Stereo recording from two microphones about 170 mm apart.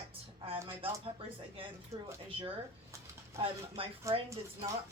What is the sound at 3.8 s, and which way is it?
Speech, 30° right (ahead or behind).